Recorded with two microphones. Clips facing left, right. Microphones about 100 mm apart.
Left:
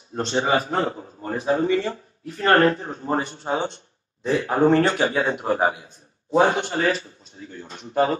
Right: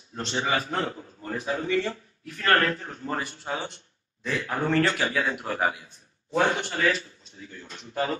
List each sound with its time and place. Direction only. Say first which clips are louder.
0.1 s a man's voice: left 6 dB; 30° left (ahead or behind)
6.5 s a man's voice: left 3 dB; 30° left (ahead or behind)